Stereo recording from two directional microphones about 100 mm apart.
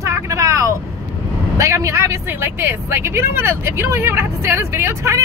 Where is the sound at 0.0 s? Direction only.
30° right (ahead or behind).